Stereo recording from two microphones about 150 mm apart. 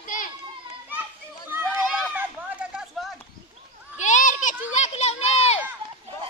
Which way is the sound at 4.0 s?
55° left (ahead or behind).